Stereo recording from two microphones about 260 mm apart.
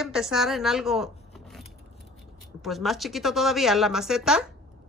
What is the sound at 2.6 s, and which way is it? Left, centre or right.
Speech, centre.